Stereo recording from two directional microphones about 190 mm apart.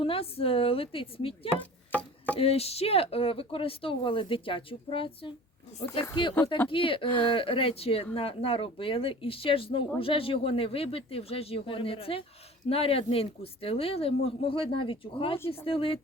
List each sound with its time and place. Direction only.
0.0 s speech: 30° left (ahead or behind)
1.9 s chopping: 5° left (ahead or behind)
2.4 s speech: 30° left (ahead or behind)
15.4 s speech: 15° left (ahead or behind)
15.6 s speech: 30° left (ahead or behind)